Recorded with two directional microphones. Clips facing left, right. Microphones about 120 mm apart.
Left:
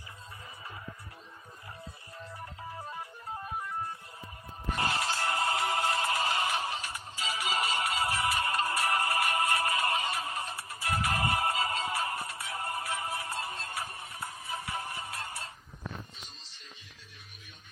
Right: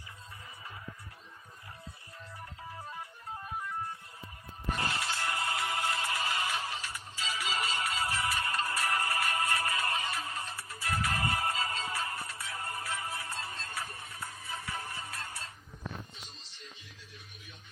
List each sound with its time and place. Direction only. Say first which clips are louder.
4.8 s music: left 5 dB; 30° left (ahead or behind)